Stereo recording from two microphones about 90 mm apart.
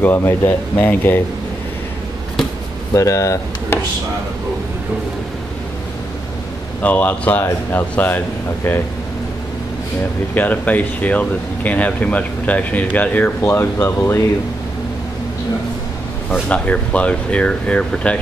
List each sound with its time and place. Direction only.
0.0 s speech: 25° left (ahead or behind)
2.9 s speech: 35° left (ahead or behind)
6.8 s speech: 20° left (ahead or behind)
10.3 s speech: 20° left (ahead or behind)
16.3 s speech: 15° left (ahead or behind)